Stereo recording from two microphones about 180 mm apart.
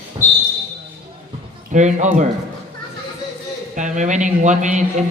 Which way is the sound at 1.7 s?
45° right (ahead or behind).